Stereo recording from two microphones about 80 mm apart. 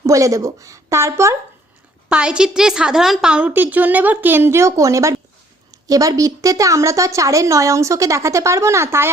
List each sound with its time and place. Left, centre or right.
0.0 s a woman's voice: right
2.0 s a woman's voice: centre
3.5 s a woman's voice: right